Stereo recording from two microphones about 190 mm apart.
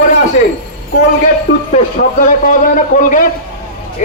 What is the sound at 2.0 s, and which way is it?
A man's voice, 45° left (ahead or behind).